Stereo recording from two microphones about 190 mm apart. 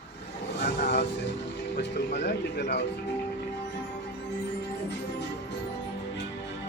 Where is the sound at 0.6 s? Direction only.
60° left (ahead or behind).